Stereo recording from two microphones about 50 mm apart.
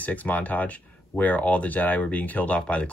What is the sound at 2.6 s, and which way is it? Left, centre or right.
Speech, left.